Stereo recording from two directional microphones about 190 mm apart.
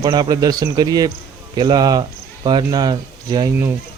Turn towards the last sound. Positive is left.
turn(degrees=-15)  # may be behind; listen again after turning